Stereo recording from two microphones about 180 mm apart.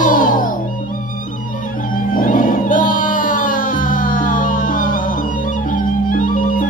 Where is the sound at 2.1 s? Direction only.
50° left (ahead or behind).